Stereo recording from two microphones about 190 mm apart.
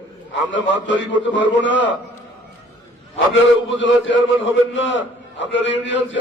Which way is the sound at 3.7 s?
75° left (ahead or behind).